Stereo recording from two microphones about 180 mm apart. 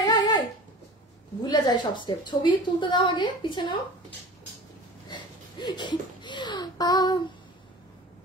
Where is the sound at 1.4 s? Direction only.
20° left (ahead or behind).